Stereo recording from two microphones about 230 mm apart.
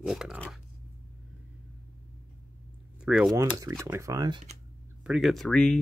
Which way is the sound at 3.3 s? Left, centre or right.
Centre.